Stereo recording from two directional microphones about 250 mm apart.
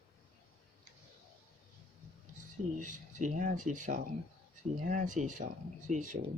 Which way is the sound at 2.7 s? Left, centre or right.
Right.